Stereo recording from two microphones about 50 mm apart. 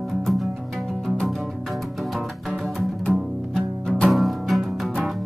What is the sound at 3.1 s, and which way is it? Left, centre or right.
Music, centre.